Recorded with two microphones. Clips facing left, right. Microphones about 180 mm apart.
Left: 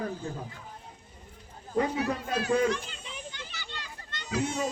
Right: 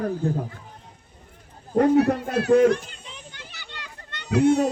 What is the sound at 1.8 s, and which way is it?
Speech, 60° right (ahead or behind).